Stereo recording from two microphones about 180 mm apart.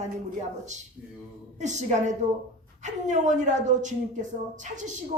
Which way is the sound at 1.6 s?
40° right (ahead or behind).